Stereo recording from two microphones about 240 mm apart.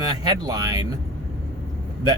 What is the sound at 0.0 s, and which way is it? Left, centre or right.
Speech, centre.